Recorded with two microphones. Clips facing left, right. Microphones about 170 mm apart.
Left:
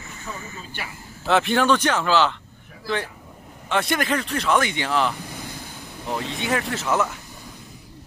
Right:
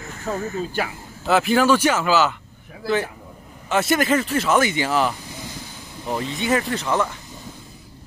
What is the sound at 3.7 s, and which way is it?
Speech, 5° right (ahead or behind).